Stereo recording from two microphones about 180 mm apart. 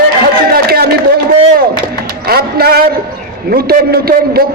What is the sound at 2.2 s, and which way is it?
A man's voice, 60° right (ahead or behind).